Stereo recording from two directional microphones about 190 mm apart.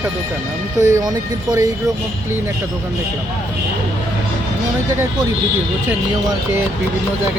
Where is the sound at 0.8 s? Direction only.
20° right (ahead or behind).